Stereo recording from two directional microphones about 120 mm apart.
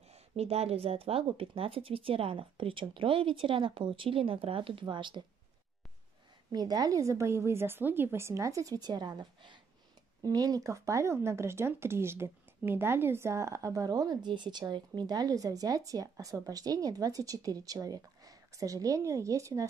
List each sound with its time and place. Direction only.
0.1 s speech: 60° right (ahead or behind); by 5.2 s 40° right (ahead or behind)
6.5 s speech: 35° right (ahead or behind)